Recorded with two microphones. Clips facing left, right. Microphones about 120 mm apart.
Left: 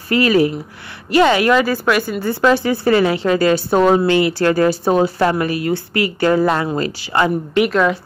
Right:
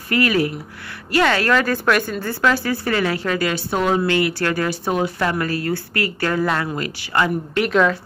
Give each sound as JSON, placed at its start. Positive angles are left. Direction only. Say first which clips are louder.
{"t": 0.1, "sound": "speech", "louder": "left 5 dB", "side_deg": 25}
{"t": 2.4, "sound": "speech", "louder": "left 5 dB", "side_deg": 25}
{"t": 5.4, "sound": "speech", "louder": "left 4 dB", "side_deg": 20}